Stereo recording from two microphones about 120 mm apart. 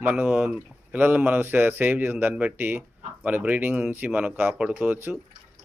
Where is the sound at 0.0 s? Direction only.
15° right (ahead or behind).